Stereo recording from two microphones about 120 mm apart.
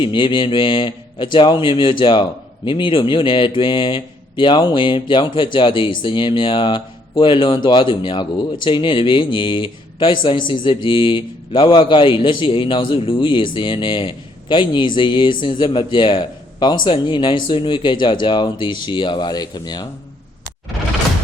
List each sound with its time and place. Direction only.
0.0 s speech: 45° left (ahead or behind)